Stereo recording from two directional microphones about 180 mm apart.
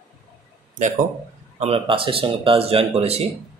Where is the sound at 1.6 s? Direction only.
30° right (ahead or behind).